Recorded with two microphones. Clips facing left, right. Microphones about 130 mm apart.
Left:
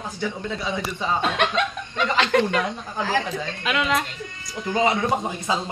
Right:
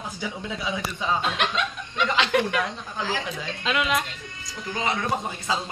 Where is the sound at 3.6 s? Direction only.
15° right (ahead or behind).